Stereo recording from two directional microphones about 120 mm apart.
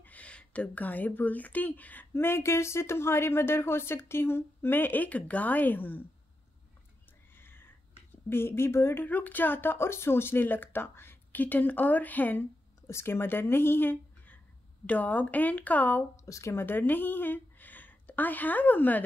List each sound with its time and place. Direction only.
0.0 s speech: 10° left (ahead or behind)
7.3 s a sound: 20° left (ahead or behind)
8.3 s speech: 20° left (ahead or behind)
16.3 s a woman's voice: 25° left (ahead or behind)